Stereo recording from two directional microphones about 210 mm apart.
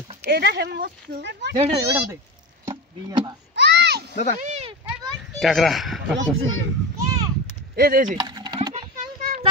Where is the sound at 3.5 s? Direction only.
55° right (ahead or behind).